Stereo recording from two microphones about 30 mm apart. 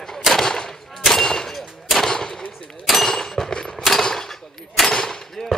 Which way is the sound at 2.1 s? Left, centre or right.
Centre.